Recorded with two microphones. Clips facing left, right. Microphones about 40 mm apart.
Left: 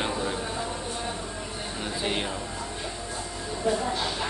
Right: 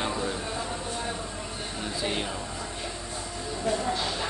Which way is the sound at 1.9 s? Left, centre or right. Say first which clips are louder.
Left 1 dB; centre.